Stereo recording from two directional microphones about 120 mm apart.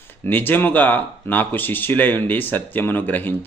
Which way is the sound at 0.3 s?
15° left (ahead or behind).